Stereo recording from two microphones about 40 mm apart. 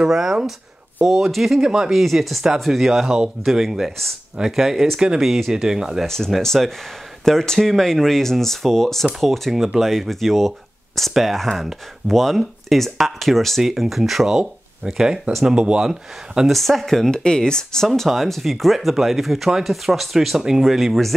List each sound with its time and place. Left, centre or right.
0.0 s speech: centre
1.6 s speech: centre
2.0 s speech: centre
6.0 s speech: centre; by 15.8 s right
15.8 s speech: centre
16.5 s speech: centre
17.9 s speech: centre